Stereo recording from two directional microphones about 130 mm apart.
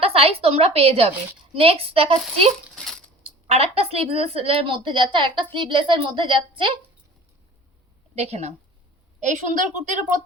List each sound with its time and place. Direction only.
0.0 s a woman's voice: 50° right (ahead or behind)
2.7 s a sound: 5° left (ahead or behind)
3.2 s a woman's voice: 55° right (ahead or behind)
8.1 s a woman's voice: 55° right (ahead or behind)
9.2 s a woman's voice: 75° right (ahead or behind)